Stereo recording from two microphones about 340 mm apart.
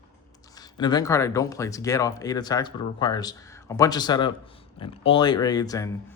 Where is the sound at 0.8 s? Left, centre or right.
Centre.